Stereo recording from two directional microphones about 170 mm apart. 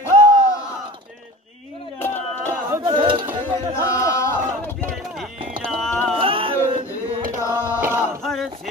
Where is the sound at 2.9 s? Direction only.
30° right (ahead or behind).